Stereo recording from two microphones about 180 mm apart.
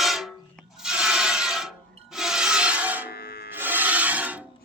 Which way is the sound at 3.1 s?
60° left (ahead or behind).